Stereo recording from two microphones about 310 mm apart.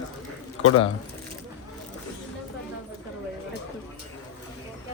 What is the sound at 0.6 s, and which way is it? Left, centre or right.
Speech, left.